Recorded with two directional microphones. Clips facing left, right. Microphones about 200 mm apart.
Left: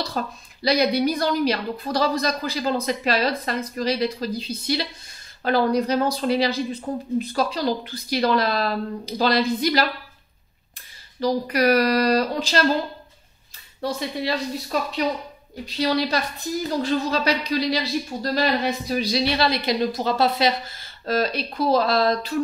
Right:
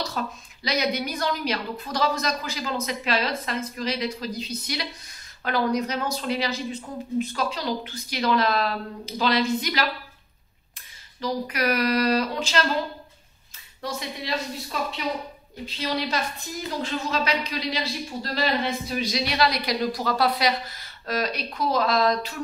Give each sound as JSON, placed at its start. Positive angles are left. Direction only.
{"t": 0.0, "sound": "a woman's voice", "side_deg": 35}
{"t": 11.1, "sound": "a woman's voice", "side_deg": 35}
{"t": 13.7, "sound": "a woman's voice", "side_deg": 35}